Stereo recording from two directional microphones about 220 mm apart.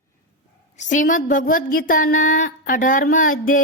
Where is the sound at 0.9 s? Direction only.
35° left (ahead or behind).